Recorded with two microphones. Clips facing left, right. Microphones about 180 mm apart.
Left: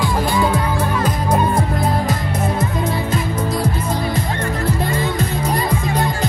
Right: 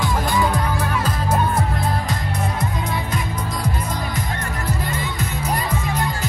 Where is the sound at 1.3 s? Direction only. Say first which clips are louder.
Left 3 dB; 20° left (ahead or behind).